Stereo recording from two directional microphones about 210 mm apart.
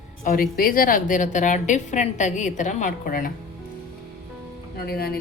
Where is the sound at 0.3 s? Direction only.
40° left (ahead or behind).